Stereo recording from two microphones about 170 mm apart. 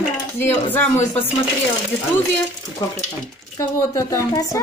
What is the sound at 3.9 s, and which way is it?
Speech, 20° left (ahead or behind).